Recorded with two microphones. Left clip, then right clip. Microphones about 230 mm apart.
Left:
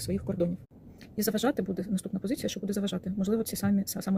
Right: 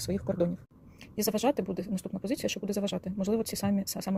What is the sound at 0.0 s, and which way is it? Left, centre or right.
Speech, centre.